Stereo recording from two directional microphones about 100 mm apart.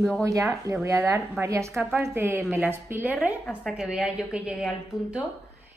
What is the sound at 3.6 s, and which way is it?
Speech, 5° right (ahead or behind).